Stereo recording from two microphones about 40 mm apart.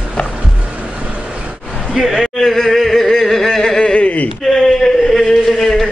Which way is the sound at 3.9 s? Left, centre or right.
Left.